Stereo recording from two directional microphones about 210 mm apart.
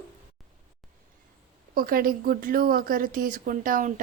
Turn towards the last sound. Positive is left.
turn(degrees=-40)  # may be behind; listen again after turning